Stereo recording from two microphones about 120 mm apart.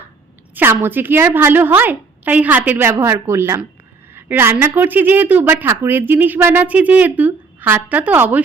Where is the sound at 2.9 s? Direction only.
25° right (ahead or behind).